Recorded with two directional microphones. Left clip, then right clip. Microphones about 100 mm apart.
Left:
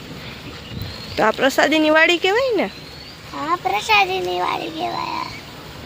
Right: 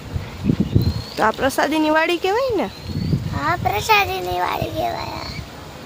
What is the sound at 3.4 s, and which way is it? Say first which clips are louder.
A child's voice: even; 5° right (ahead or behind).